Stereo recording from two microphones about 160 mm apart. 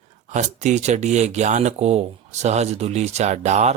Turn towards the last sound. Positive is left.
turn(degrees=-45)  # may be behind; listen again after turning